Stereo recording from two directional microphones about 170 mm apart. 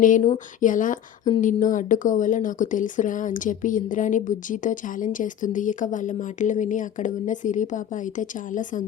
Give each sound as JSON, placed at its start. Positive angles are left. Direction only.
{"t": 0.0, "sound": "speech", "side_deg": 50}